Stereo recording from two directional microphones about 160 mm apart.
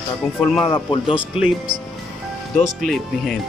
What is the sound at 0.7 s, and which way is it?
Speech, 30° left (ahead or behind).